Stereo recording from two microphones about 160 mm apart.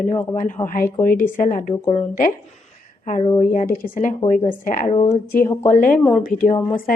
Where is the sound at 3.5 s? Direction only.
60° left (ahead or behind).